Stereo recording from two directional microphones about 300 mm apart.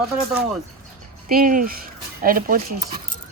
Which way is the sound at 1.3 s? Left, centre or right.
Right.